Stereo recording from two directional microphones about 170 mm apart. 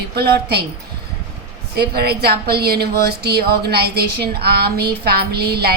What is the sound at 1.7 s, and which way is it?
A woman's voice, 70° right (ahead or behind).